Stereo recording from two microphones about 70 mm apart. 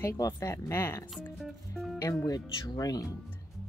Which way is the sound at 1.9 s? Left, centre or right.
Left.